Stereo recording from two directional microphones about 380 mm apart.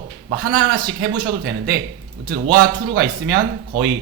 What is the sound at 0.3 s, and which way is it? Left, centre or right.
Speech, right.